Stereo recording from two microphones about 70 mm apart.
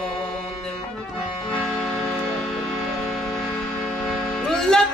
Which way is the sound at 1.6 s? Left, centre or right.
Centre.